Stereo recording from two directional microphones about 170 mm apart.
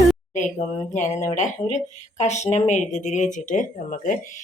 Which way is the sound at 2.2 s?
45° left (ahead or behind).